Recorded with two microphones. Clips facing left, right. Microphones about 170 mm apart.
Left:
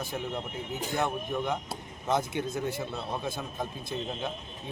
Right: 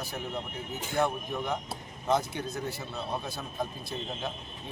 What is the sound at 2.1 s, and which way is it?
Speech, 20° left (ahead or behind).